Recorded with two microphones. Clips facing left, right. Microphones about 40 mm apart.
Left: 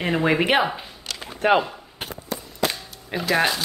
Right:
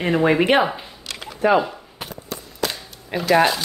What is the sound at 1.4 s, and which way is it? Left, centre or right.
Speech, left.